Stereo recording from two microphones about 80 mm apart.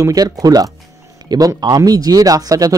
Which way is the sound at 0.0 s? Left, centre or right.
Right.